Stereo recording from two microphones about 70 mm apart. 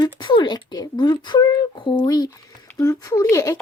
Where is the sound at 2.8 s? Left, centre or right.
Left.